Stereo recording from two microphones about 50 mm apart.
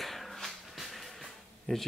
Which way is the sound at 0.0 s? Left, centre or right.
Centre.